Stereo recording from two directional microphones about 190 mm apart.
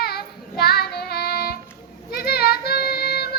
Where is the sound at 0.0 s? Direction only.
55° left (ahead or behind).